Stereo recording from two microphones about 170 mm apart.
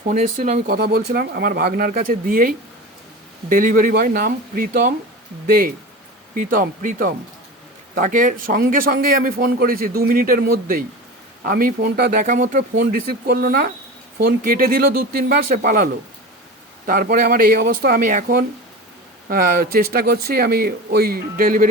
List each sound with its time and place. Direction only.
0.1 s speech: 45° right (ahead or behind)
0.7 s speech: 65° right (ahead or behind)
6.3 s speech: 50° right (ahead or behind)
12.7 s speech: 70° right (ahead or behind); by 21.7 s 55° right (ahead or behind)